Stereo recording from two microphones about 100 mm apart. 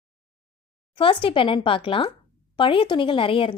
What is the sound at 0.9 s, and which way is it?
A woman's voice, 60° left (ahead or behind).